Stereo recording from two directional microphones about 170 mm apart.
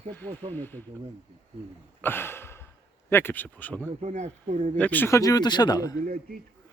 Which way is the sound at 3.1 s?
15° left (ahead or behind).